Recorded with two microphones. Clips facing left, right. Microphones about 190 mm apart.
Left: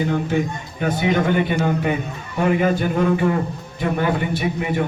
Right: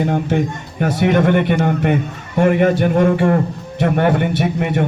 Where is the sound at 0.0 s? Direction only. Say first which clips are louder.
Right 3 dB; 65° right (ahead or behind).